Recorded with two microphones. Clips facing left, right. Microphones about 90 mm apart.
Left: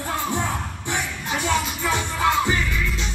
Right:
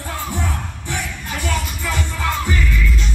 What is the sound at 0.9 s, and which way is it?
Music, 20° left (ahead or behind).